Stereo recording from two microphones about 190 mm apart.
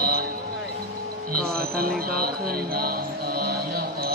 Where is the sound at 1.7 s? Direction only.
50° right (ahead or behind).